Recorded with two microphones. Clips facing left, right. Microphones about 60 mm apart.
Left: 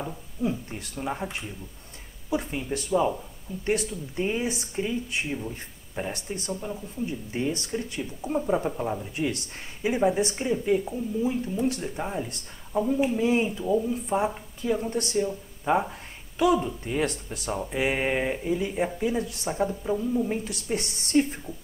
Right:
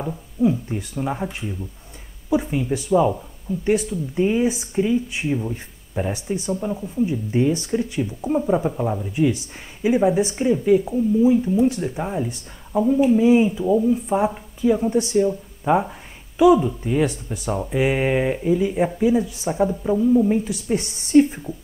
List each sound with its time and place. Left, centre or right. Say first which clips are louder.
0.0 s speech: right 9 dB; centre
6.6 s speech: right 9 dB; centre
7.1 s speech: right 8 dB; centre